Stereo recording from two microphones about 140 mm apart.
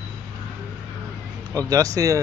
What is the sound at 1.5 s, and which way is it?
Speech, 25° right (ahead or behind).